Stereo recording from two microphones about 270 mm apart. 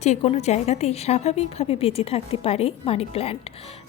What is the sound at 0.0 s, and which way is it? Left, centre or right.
A woman's voice, left.